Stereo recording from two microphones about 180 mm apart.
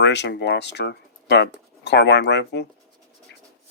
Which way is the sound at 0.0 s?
75° left (ahead or behind).